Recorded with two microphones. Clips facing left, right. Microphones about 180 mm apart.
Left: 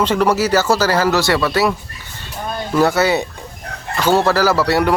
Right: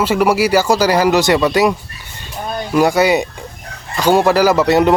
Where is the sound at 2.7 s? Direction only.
15° right (ahead or behind).